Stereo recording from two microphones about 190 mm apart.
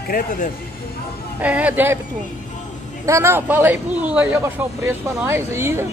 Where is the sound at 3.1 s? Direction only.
15° right (ahead or behind).